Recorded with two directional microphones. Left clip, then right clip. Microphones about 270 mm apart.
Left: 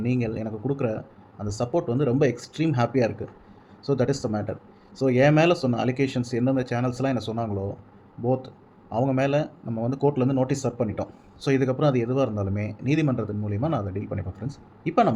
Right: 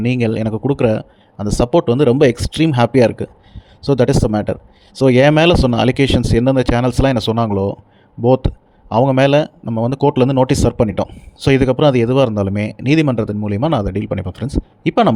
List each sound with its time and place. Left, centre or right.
0.0 s speech: right